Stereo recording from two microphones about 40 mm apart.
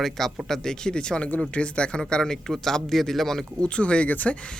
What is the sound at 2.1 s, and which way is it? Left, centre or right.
Speech, centre.